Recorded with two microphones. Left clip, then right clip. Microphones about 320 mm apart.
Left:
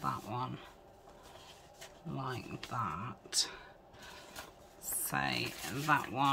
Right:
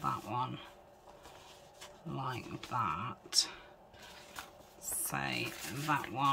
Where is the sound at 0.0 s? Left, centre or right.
Centre.